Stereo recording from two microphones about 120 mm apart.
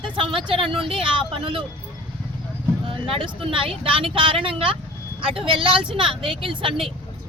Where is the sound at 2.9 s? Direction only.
50° right (ahead or behind).